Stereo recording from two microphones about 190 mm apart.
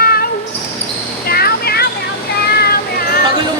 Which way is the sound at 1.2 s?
55° left (ahead or behind).